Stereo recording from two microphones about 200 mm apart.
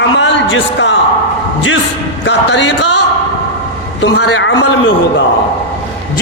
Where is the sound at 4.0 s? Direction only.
65° left (ahead or behind).